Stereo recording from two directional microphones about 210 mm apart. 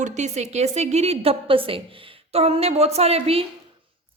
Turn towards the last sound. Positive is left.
turn(degrees=-30)  # may be behind; listen again after turning